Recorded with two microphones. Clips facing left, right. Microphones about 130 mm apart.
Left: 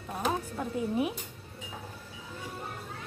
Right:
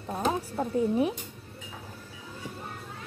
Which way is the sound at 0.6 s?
35° right (ahead or behind).